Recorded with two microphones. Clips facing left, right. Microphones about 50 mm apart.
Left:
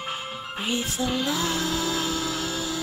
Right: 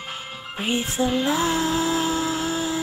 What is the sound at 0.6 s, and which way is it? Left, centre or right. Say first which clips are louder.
Music: right 4 dB; right.